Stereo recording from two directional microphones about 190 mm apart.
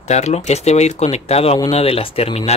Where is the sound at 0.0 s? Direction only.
35° left (ahead or behind).